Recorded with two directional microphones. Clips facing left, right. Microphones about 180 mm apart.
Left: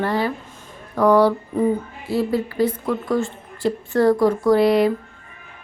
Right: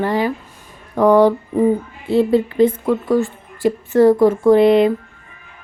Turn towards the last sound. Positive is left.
turn(degrees=-20)  # may be behind; listen again after turning